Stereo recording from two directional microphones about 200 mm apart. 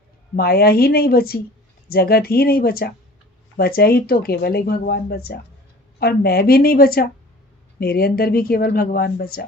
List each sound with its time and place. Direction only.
0.3 s speech: 50° left (ahead or behind)